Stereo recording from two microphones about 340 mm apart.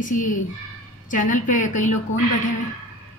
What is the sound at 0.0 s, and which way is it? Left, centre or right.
A woman's voice, left.